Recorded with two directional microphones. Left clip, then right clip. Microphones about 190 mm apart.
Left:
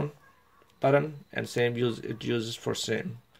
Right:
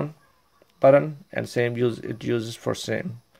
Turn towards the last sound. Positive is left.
turn(degrees=-45)  # may be behind; listen again after turning